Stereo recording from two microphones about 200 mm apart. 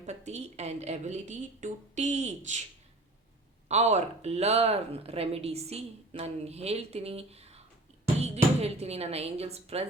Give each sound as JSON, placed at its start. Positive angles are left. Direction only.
{"t": 0.0, "sound": "speech", "side_deg": -35}
{"t": 3.7, "sound": "speech", "side_deg": -35}